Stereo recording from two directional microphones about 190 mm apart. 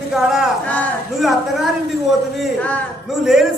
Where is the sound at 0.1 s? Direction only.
Centre (ahead or behind).